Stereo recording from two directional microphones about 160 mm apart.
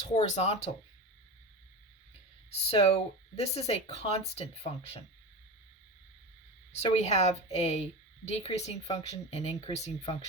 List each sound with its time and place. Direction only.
0.0 s speech: 45° left (ahead or behind)
2.5 s speech: 40° left (ahead or behind)
6.7 s a woman's voice: 40° left (ahead or behind)